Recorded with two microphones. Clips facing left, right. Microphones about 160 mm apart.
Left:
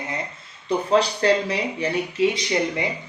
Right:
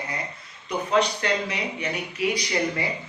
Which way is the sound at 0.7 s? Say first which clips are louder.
Left 3 dB; 30° left (ahead or behind).